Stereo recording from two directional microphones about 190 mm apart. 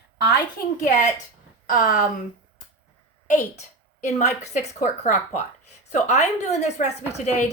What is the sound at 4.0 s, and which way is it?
A woman's voice, 40° left (ahead or behind).